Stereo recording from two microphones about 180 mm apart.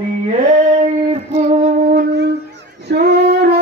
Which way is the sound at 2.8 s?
65° right (ahead or behind).